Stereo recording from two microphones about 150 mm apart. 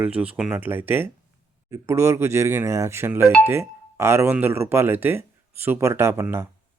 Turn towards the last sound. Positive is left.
turn(degrees=-15)  # may be behind; listen again after turning